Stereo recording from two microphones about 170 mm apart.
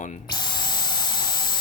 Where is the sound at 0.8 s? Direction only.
25° left (ahead or behind).